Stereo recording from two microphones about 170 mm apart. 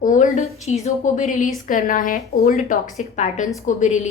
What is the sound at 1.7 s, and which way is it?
A woman's voice, 55° left (ahead or behind).